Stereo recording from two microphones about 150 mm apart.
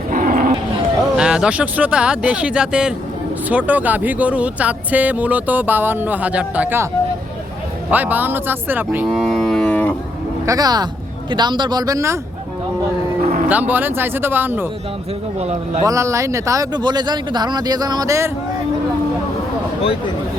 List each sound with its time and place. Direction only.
0.1 s dog: 60° right (ahead or behind)
1.1 s speech: 5° right (ahead or behind)
7.9 s speech: 10° right (ahead or behind)
9.0 s livestock: centre (ahead or behind)
10.4 s speech: 25° right (ahead or behind)
13.5 s speech: 10° right (ahead or behind)
15.4 s a man's voice: 45° right (ahead or behind)
15.8 s speech: 20° right (ahead or behind)